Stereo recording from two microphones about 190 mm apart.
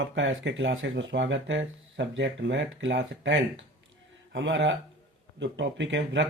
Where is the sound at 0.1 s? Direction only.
70° right (ahead or behind).